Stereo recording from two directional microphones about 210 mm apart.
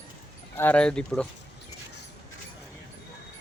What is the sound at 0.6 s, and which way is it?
Speech, 5° left (ahead or behind).